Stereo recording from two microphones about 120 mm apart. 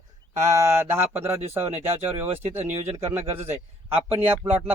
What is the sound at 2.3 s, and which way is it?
Speech, 60° right (ahead or behind).